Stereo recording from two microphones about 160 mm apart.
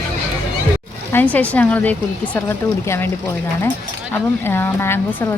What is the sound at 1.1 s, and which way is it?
A woman's voice, 10° left (ahead or behind).